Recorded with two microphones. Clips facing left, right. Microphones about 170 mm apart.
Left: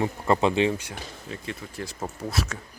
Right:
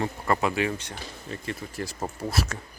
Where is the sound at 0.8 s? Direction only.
5° left (ahead or behind).